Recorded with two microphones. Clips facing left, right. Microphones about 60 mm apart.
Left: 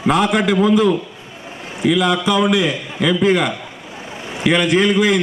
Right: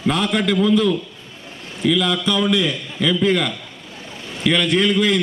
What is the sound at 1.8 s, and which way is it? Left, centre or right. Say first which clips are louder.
A man's voice: left 3 dB; centre.